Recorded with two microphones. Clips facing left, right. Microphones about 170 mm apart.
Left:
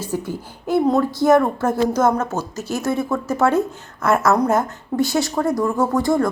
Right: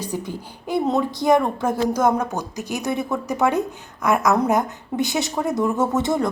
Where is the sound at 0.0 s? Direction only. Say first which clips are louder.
Left 3 dB; 15° right (ahead or behind).